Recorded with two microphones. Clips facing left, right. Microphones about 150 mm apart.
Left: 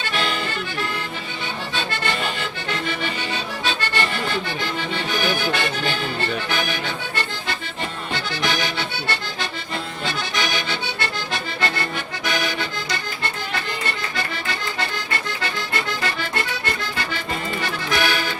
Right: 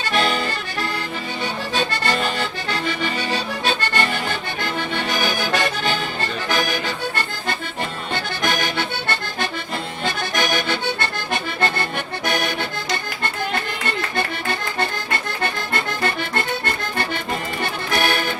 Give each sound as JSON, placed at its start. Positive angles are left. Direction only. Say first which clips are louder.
{"t": 0.1, "sound": "accordion", "louder": "right 5 dB", "side_deg": -40}
{"t": 1.7, "sound": "accordion", "louder": "right 4 dB", "side_deg": -40}
{"t": 3.7, "sound": "accordion", "louder": "right 3 dB", "side_deg": -50}
{"t": 5.5, "sound": "music", "louder": "right 2 dB", "side_deg": -40}
{"t": 8.1, "sound": "accordion", "louder": "right 1 dB", "side_deg": -50}
{"t": 14.2, "sound": "accordion", "louder": "right 4 dB", "side_deg": -55}
{"t": 17.6, "sound": "music", "louder": "right 1 dB", "side_deg": -50}